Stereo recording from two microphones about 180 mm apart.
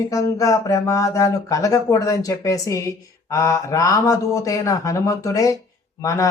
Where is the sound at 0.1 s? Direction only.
20° left (ahead or behind).